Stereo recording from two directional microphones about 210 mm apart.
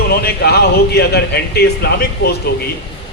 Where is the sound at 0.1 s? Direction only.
50° left (ahead or behind).